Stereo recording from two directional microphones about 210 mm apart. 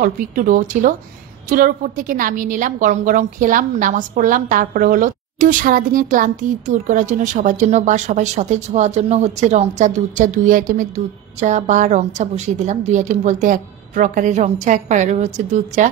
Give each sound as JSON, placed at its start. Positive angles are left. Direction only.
{"t": 0.0, "sound": "a woman's voice", "side_deg": -40}